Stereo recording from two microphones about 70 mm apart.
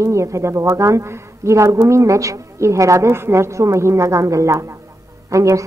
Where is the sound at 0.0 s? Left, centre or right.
Right.